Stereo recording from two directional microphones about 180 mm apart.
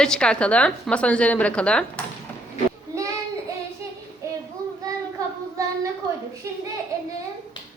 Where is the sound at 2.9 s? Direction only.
15° right (ahead or behind).